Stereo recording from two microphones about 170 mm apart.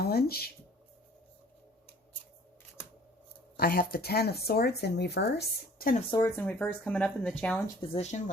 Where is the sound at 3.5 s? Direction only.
60° left (ahead or behind).